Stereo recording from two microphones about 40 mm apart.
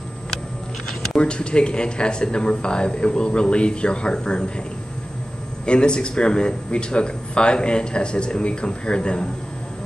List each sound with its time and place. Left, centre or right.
0.8 s speech: left
5.7 s speech: left